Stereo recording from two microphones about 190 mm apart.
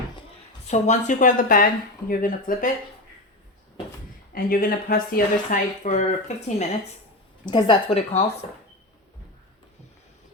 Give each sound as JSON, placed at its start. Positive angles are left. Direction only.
{"t": 0.7, "sound": "speech", "side_deg": 40}
{"t": 4.3, "sound": "speech", "side_deg": 50}
{"t": 7.4, "sound": "a woman's voice", "side_deg": 25}